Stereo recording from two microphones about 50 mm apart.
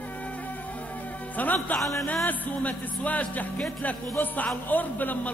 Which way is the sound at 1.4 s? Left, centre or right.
Left.